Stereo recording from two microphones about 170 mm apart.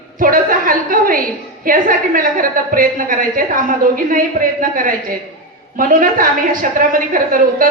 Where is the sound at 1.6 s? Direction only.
55° right (ahead or behind).